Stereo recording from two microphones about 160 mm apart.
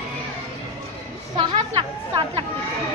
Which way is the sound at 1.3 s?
30° right (ahead or behind).